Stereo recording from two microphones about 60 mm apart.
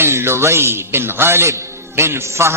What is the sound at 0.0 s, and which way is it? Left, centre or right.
A man's voice, right.